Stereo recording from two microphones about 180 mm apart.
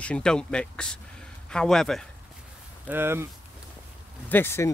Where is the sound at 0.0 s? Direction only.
5° left (ahead or behind).